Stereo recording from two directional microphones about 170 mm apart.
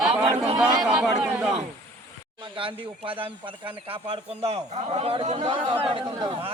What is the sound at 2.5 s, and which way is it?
Speech, 30° right (ahead or behind).